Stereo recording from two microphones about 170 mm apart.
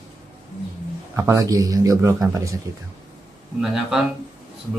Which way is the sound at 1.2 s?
20° right (ahead or behind).